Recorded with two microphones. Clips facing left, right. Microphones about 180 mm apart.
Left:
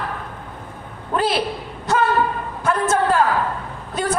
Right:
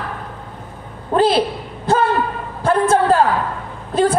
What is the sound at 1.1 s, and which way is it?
Speech, 30° right (ahead or behind).